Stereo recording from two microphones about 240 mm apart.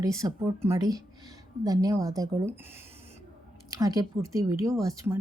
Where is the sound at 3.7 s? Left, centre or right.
Centre.